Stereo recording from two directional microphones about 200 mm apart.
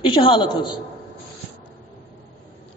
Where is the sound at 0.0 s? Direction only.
25° left (ahead or behind).